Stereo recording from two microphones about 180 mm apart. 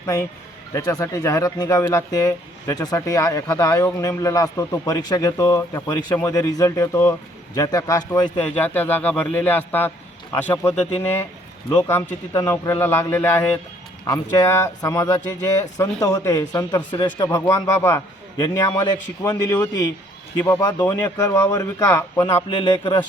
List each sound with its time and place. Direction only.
0.0 s a man's voice: 15° left (ahead or behind)
8.4 s a man's voice: 10° left (ahead or behind)
22.4 s a man's voice: 25° left (ahead or behind)